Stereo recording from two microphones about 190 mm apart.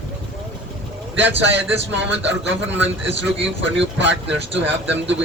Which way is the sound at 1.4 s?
70° right (ahead or behind).